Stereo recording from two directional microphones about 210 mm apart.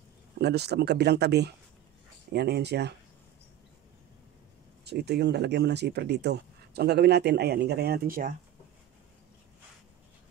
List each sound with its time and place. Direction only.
0.4 s speech: 50° right (ahead or behind)
4.8 s speech: 50° right (ahead or behind)